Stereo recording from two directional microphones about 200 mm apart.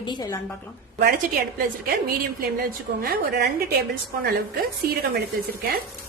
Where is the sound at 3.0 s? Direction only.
50° right (ahead or behind).